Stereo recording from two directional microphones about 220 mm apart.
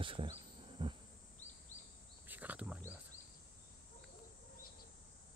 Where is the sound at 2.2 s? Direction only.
5° right (ahead or behind).